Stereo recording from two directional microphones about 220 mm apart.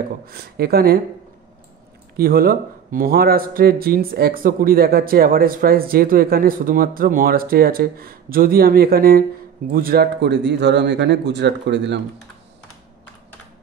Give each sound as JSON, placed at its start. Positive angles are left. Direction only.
{"t": 0.3, "sound": "speech", "side_deg": -45}
{"t": 2.1, "sound": "a man's voice", "side_deg": -45}